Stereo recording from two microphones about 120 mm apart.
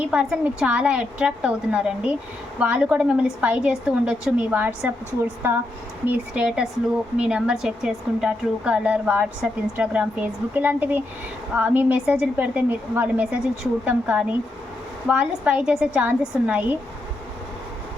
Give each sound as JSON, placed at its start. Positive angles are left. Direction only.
{"t": 0.0, "sound": "speech", "side_deg": -10}